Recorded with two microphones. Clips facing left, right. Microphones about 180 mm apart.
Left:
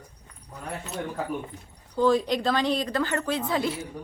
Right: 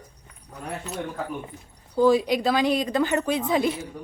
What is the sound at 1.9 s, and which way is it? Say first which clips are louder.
A woman's voice: right 3 dB; 10° right (ahead or behind).